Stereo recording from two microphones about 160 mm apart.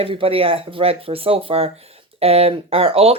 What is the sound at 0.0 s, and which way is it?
Speech, 35° right (ahead or behind).